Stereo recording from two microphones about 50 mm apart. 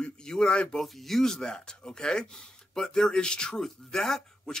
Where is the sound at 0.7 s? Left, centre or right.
Centre.